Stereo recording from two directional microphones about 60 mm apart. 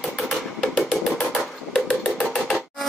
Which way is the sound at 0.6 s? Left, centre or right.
Centre.